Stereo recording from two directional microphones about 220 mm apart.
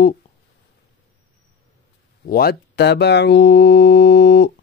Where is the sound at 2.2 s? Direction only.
45° left (ahead or behind).